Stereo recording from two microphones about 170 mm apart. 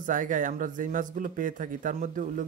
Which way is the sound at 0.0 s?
50° right (ahead or behind).